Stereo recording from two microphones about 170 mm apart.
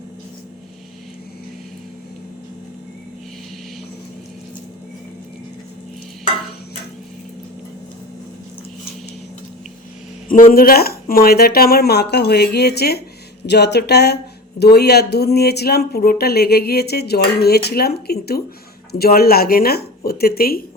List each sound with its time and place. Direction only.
10.2 s speech: 55° left (ahead or behind); by 13.0 s 70° left (ahead or behind)
13.5 s speech: 80° left; by 20.6 s 60° left (ahead or behind)